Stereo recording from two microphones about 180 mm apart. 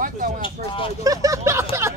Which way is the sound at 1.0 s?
20° right (ahead or behind).